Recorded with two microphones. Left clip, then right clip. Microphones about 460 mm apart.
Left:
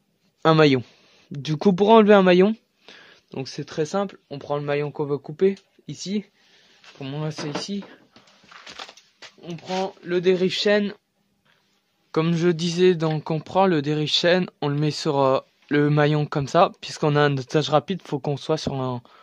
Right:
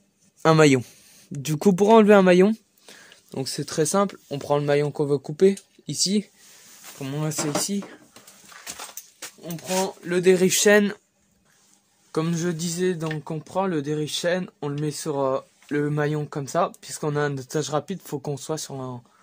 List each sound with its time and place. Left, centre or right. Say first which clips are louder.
0.4 s speech: even; left
7.0 s speech: right 2 dB; left
9.4 s speech: right 1 dB; left
12.1 s speech: left 5 dB; left